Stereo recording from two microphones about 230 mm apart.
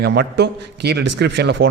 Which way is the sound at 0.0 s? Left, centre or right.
Right.